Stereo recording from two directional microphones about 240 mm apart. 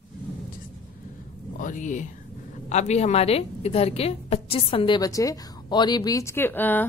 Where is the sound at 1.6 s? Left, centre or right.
Left.